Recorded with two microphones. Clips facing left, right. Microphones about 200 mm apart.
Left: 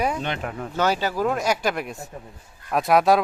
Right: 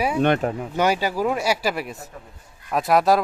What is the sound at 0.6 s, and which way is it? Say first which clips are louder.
Speech: right 2 dB; 10° right (ahead or behind).